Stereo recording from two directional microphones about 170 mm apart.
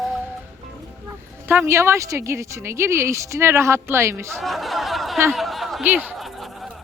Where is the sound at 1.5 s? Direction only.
15° right (ahead or behind).